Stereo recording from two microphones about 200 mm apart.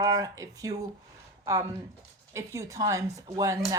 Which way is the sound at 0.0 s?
20° right (ahead or behind).